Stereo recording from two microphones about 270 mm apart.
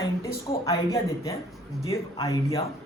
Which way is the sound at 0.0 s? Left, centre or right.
Centre.